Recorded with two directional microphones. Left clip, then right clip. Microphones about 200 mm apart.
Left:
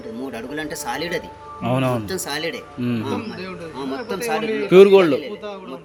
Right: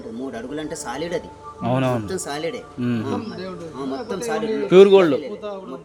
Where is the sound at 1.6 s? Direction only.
Centre (ahead or behind).